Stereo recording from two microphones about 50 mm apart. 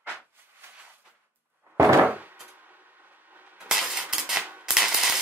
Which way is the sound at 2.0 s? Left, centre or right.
Right.